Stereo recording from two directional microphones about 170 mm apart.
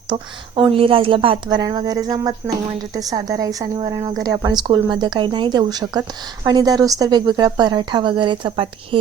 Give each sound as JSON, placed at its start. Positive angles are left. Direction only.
{"t": 0.1, "sound": "a woman's voice", "side_deg": -30}